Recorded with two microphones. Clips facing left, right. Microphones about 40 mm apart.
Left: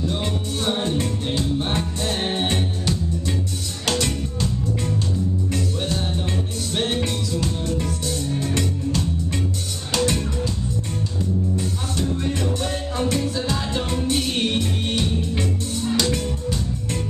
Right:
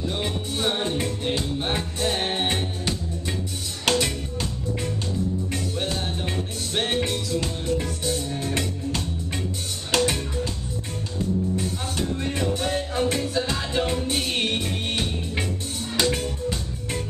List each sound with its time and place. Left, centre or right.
0.1 s music: centre
7.3 s music: centre
11.9 s music: centre